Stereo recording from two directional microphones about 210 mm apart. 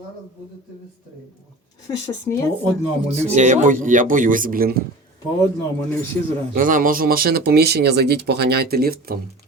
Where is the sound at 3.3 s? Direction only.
35° right (ahead or behind).